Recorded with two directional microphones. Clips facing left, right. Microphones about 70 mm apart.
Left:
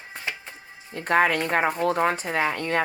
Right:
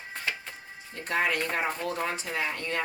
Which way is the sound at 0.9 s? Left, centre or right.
Left.